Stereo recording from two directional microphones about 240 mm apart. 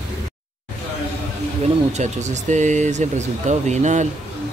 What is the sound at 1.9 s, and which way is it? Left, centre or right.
Speech, right.